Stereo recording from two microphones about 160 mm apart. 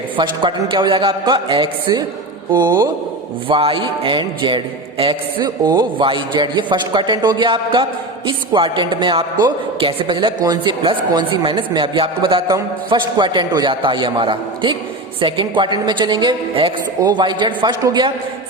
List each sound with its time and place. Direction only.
0.2 s a man's voice: 30° right (ahead or behind)
2.5 s music: 25° right (ahead or behind)